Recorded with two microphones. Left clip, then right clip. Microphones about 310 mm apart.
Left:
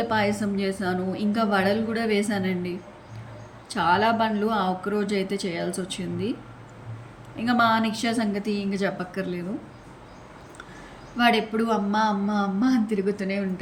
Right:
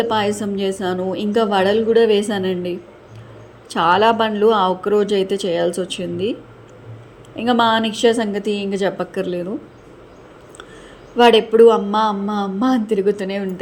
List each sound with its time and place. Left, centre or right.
0.1 s a woman's voice: centre
7.3 s a woman's voice: centre
11.2 s a woman's voice: centre